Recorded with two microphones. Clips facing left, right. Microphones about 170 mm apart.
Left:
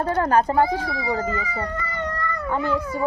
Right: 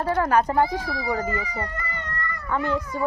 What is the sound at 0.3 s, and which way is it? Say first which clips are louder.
Speech: left 3 dB; 30° left (ahead or behind).